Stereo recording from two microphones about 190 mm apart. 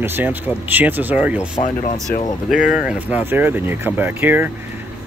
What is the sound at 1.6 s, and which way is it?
Speech, 40° left (ahead or behind).